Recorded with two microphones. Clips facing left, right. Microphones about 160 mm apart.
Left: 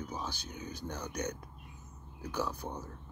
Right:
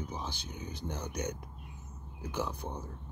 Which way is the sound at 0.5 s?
10° right (ahead or behind).